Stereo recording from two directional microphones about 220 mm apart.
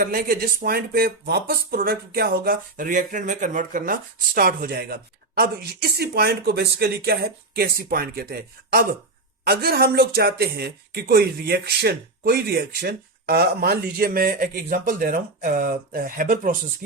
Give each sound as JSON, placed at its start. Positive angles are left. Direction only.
{"t": 0.0, "sound": "speech", "side_deg": -40}